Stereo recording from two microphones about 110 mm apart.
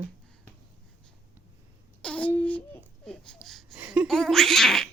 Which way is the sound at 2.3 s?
15° left (ahead or behind).